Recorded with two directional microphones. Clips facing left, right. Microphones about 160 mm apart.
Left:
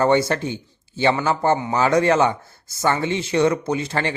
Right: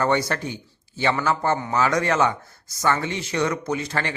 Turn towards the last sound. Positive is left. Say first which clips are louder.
# left 3 dB
turn(degrees=30)  # may be behind; listen again after turning